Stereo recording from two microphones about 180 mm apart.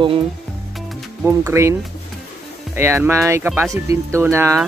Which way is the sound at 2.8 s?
15° right (ahead or behind).